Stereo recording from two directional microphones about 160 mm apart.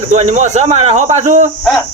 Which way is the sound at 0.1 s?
45° right (ahead or behind).